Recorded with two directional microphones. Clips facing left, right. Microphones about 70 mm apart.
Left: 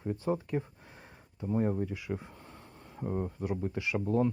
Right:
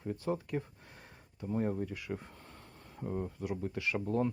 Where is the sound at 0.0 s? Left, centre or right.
Left.